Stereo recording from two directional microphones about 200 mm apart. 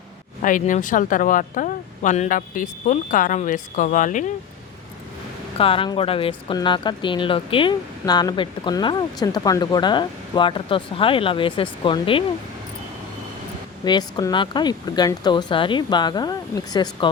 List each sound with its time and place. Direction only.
0.4 s speech: 40° left (ahead or behind)
5.5 s speech: 25° left (ahead or behind)
13.8 s speech: 20° left (ahead or behind)